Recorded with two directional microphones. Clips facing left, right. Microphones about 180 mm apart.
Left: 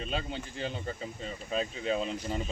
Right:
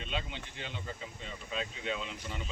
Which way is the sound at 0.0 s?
40° left (ahead or behind).